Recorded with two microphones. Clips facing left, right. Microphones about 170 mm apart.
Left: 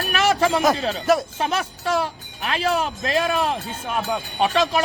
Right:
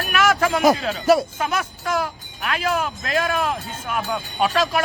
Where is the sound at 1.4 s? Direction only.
30° left (ahead or behind).